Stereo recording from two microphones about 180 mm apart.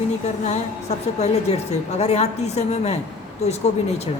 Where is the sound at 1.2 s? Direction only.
40° left (ahead or behind).